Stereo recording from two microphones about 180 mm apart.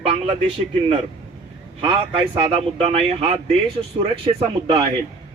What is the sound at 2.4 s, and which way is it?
A man's voice, 30° right (ahead or behind).